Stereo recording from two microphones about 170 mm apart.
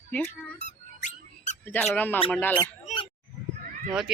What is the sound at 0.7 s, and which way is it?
Squeak, 45° left (ahead or behind).